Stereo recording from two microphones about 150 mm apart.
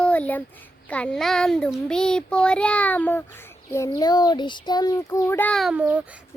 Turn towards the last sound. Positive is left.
turn(degrees=-10)  # may be behind; listen again after turning